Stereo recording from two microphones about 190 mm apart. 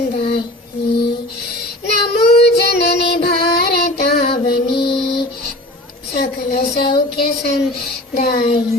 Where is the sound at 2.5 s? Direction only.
60° left (ahead or behind).